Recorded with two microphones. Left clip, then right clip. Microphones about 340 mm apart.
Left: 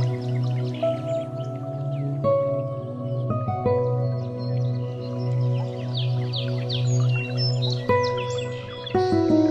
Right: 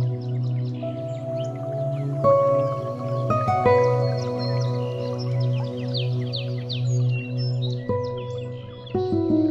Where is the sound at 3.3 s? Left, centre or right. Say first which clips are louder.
Right 6 dB; right.